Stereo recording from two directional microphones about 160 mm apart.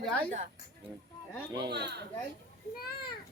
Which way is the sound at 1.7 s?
90° right.